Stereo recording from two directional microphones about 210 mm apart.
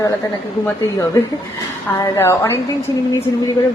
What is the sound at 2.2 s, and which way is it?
Speech, 10° left (ahead or behind).